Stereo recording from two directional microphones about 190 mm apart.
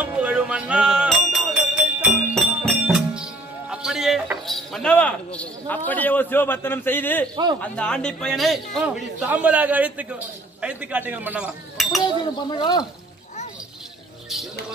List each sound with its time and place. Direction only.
0.0 s music: 10° right (ahead or behind)
3.7 s a sound: 5° right (ahead or behind)
5.9 s a man's voice: 10° left (ahead or behind)
12.4 s speech: 20° left (ahead or behind)